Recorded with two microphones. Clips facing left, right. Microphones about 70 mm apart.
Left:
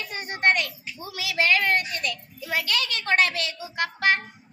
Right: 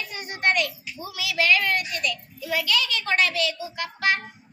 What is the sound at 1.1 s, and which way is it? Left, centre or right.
A woman's voice, left.